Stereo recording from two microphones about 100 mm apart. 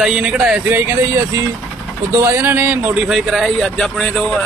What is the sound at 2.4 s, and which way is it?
Speech, 20° right (ahead or behind).